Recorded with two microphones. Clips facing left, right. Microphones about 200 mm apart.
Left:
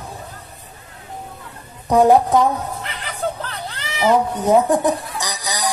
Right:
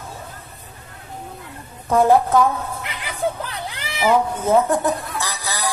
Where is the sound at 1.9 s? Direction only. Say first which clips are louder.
Left 2 dB; 15° left (ahead or behind).